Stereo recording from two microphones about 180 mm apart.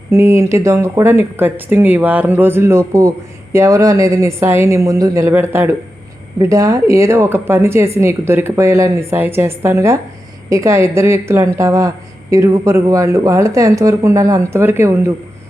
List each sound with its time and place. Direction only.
0.1 s a woman's voice: 15° right (ahead or behind)